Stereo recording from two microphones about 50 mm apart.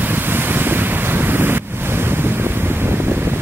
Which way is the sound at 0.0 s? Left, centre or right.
Right.